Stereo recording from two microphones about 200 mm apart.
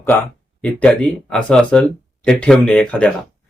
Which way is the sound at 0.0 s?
10° left (ahead or behind).